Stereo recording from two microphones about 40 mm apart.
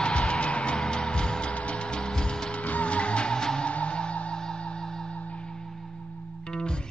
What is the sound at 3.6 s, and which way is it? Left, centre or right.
Music, left.